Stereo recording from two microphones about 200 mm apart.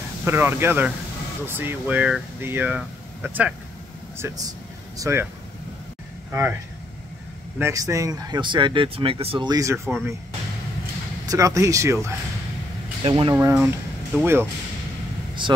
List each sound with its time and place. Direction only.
0.2 s speech: 10° right (ahead or behind)
7.5 s speech: 15° right (ahead or behind)
11.2 s speech: 15° right (ahead or behind)
13.0 s speech: 25° right (ahead or behind)
13.3 s speech: 10° right (ahead or behind)
15.4 s speech: 25° right (ahead or behind)